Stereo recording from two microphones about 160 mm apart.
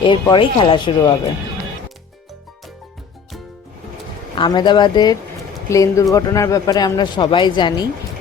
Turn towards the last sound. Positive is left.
turn(degrees=25)  # may be behind; listen again after turning